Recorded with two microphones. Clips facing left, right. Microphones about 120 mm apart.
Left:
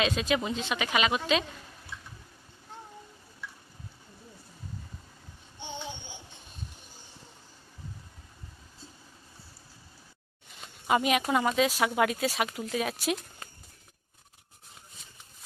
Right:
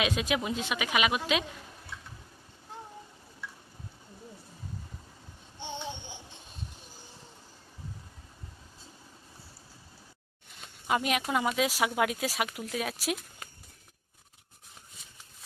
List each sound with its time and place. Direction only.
0.0 s speech: 10° right (ahead or behind)
5.6 s a sound: centre (ahead or behind)
10.8 s speech: centre (ahead or behind)